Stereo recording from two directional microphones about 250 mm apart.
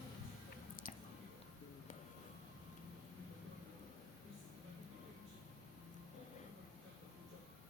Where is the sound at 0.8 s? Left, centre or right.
Left.